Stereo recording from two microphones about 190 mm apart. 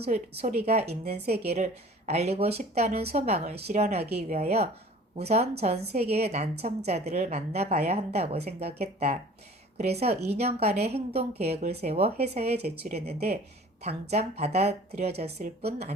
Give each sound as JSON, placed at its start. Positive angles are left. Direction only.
{"t": 0.0, "sound": "a woman's voice", "side_deg": -35}
{"t": 13.1, "sound": "speech", "side_deg": -55}
{"t": 13.8, "sound": "a woman's voice", "side_deg": -35}